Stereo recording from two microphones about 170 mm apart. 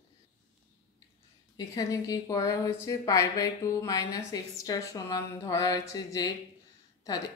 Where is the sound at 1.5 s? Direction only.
20° left (ahead or behind).